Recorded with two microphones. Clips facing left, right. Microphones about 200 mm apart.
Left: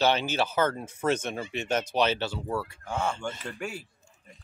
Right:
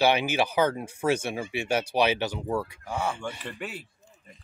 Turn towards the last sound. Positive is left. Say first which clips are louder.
# left 1 dB
turn(degrees=0)  # may be behind; listen again after turning